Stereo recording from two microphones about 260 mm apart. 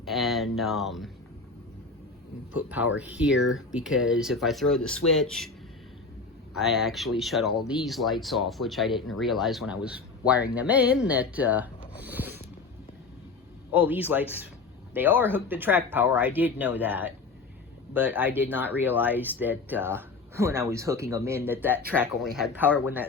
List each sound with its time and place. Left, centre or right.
0.0 s speech: centre
2.6 s speech: centre
3.3 s speech: left
3.7 s speech: centre
6.6 s speech: centre
11.9 s a sound: centre
13.7 s speech: centre